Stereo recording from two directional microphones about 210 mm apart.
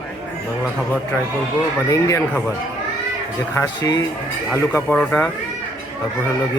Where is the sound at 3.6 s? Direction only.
20° left (ahead or behind).